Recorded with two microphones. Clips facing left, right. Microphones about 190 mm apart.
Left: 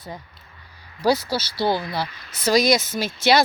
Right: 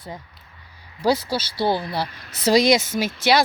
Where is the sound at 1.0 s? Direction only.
25° right (ahead or behind).